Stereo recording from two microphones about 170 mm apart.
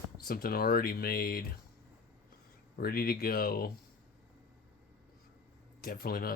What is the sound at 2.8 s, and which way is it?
Speech, 60° left (ahead or behind).